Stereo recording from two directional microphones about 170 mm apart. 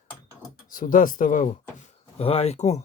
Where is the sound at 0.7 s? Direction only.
55° left (ahead or behind).